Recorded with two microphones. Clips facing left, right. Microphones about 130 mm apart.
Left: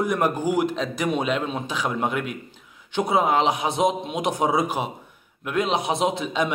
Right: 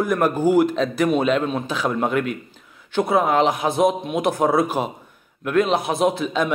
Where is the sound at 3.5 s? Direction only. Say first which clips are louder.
Right 3 dB; 20° left (ahead or behind).